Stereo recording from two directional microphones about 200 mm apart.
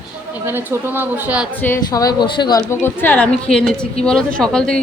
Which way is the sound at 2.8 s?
10° left (ahead or behind).